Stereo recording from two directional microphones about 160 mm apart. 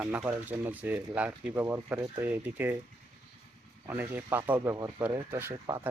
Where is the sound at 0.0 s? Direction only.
10° right (ahead or behind).